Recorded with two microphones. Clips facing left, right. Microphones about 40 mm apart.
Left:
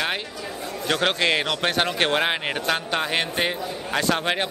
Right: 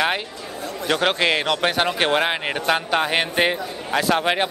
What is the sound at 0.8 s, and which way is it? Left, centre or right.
A man's voice, centre.